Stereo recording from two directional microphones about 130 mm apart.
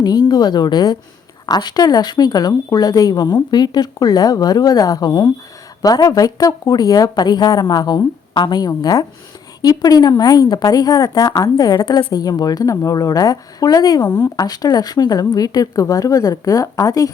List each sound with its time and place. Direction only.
0.0 s speech: 35° left (ahead or behind)